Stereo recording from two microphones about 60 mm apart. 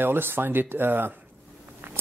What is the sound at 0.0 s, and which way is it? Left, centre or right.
A man's voice, right.